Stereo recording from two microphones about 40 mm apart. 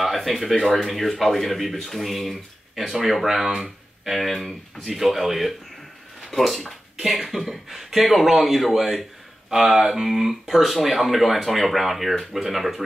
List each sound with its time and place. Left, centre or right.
0.0 s speech: centre
7.0 s speech: centre